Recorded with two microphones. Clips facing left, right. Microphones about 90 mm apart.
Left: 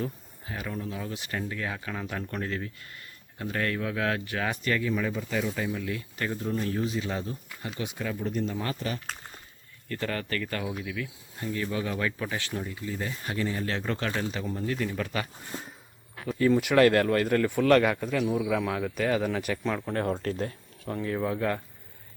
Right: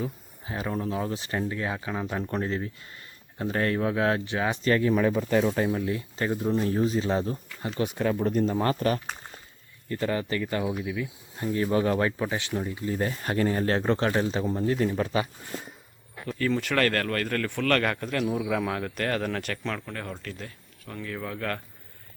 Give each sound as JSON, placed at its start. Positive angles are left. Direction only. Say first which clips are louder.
{"t": 0.4, "sound": "speech", "louder": "right 5 dB", "side_deg": -30}
{"t": 4.6, "sound": "speech", "louder": "right 8 dB", "side_deg": -40}
{"t": 5.8, "sound": "speech", "louder": "right 4 dB", "side_deg": -30}
{"t": 6.3, "sound": "speech", "louder": "right 5 dB", "side_deg": -20}
{"t": 6.7, "sound": "speech", "louder": "right 5 dB", "side_deg": -35}
{"t": 7.8, "sound": "speech", "louder": "right 7 dB", "side_deg": -45}
{"t": 9.9, "sound": "speech", "louder": "right 4 dB", "side_deg": -20}
{"t": 11.5, "sound": "speech", "louder": "right 7 dB", "side_deg": -35}
{"t": 12.2, "sound": "speech", "louder": "right 4 dB", "side_deg": -20}
{"t": 12.8, "sound": "speech", "louder": "right 5 dB", "side_deg": -40}
{"t": 16.4, "sound": "speech", "louder": "left 5 dB", "side_deg": 10}
{"t": 17.9, "sound": "speech", "louder": "left 1 dB", "side_deg": 0}
{"t": 19.8, "sound": "speech", "louder": "left 8 dB", "side_deg": 35}